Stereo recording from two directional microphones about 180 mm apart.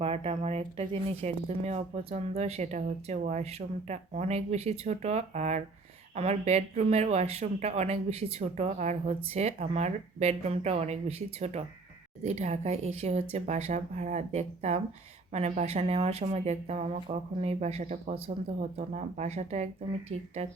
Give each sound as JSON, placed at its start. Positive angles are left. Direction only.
{"t": 0.0, "sound": "speech", "side_deg": -35}